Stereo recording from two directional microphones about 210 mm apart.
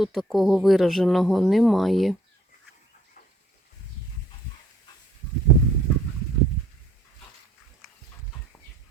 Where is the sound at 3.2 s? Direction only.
40° left (ahead or behind).